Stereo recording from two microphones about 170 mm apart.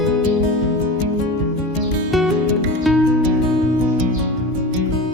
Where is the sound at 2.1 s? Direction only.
Centre (ahead or behind).